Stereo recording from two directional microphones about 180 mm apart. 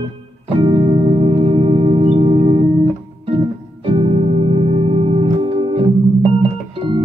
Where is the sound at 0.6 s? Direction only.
25° right (ahead or behind).